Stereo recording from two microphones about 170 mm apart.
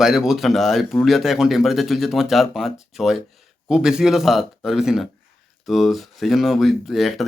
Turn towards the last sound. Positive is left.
turn(degrees=0)  # may be behind; listen again after turning